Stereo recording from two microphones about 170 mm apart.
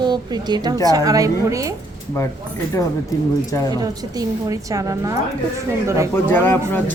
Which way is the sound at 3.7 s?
20° right (ahead or behind).